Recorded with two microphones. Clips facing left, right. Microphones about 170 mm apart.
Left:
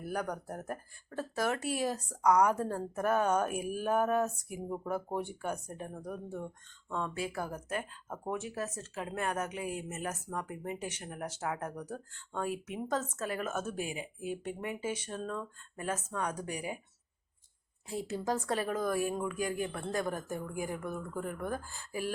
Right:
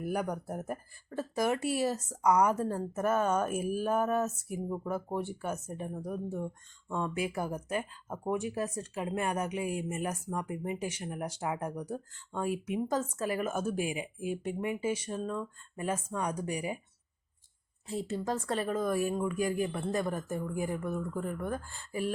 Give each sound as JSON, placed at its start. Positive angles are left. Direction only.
{"t": 0.0, "sound": "speech", "side_deg": -10}
{"t": 17.8, "sound": "speech", "side_deg": 0}